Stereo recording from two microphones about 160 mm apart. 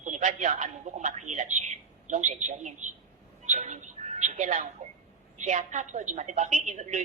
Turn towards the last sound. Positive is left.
turn(degrees=-45)  # may be behind; listen again after turning